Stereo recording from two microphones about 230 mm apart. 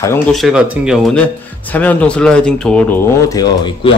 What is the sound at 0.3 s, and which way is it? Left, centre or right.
Speech, centre.